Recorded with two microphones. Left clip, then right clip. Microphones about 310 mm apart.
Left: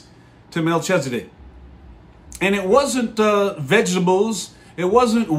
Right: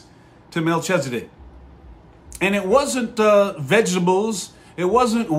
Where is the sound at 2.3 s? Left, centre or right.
Centre.